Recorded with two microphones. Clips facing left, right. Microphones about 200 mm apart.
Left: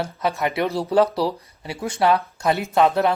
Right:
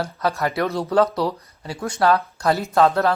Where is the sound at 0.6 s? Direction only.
30° left (ahead or behind).